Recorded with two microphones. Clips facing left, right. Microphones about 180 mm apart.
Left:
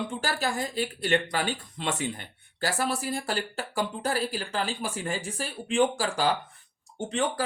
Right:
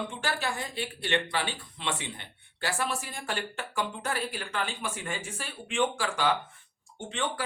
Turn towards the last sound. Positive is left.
turn(degrees=40)  # may be behind; listen again after turning